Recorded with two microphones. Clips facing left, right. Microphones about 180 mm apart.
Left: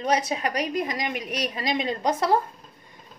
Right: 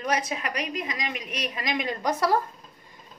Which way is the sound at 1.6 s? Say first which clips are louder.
Left 1 dB; 30° left (ahead or behind).